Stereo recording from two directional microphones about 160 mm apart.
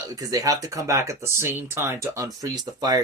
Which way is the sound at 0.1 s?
20° right (ahead or behind).